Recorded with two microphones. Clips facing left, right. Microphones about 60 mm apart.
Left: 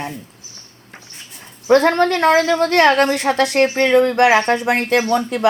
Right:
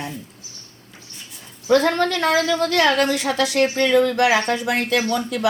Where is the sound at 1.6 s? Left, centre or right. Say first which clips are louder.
Left 4 dB; left.